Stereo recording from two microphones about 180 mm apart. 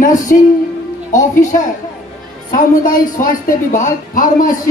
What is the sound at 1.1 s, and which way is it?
Speech, 45° left (ahead or behind).